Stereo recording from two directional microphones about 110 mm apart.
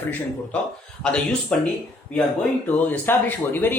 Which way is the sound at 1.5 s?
10° left (ahead or behind).